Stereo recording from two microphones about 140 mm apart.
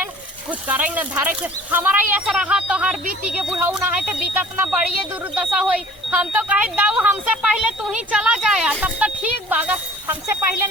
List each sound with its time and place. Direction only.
0.5 s speech: 10° right (ahead or behind)
3.0 s speech: 80° right
3.6 s speech: 15° right (ahead or behind)